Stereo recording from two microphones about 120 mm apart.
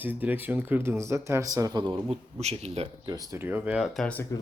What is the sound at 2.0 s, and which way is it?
Speech, 65° right (ahead or behind).